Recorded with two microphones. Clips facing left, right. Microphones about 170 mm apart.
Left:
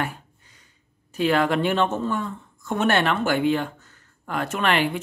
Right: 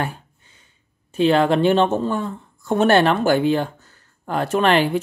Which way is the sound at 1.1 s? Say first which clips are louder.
Right 5 dB; 25° right (ahead or behind).